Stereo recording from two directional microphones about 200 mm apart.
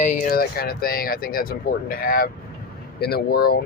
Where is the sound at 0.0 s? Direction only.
40° left (ahead or behind).